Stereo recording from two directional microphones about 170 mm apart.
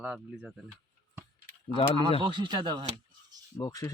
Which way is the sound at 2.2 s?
30° right (ahead or behind).